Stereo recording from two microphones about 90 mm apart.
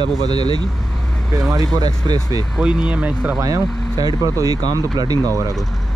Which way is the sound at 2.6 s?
10° right (ahead or behind).